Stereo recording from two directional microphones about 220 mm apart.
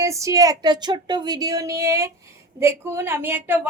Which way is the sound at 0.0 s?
15° right (ahead or behind).